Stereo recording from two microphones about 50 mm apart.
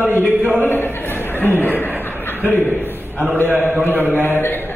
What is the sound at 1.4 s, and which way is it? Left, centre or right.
A man's voice, left.